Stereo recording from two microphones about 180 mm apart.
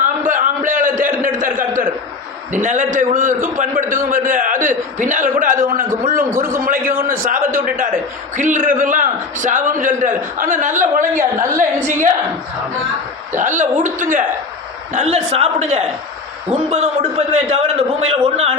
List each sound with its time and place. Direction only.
0.3 s a sound: 45° right (ahead or behind)
2.5 s a man's voice: 45° right (ahead or behind)
13.3 s a man's voice: 45° right (ahead or behind)
14.9 s a man's voice: 35° right (ahead or behind)